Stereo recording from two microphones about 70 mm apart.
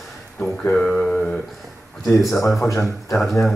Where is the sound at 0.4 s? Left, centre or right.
Centre.